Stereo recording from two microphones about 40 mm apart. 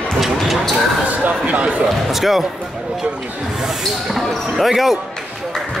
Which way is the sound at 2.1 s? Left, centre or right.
Centre.